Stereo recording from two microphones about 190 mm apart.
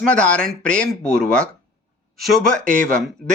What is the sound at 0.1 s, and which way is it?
Speech, 5° left (ahead or behind).